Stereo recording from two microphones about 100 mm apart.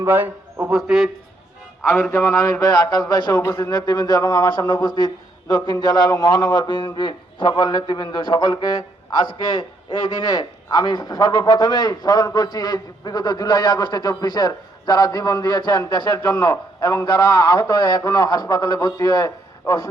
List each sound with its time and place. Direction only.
0.0 s a man's voice: 20° right (ahead or behind)
0.7 s a man's voice: 5° right (ahead or behind)
2.1 s a man's voice: 35° left (ahead or behind)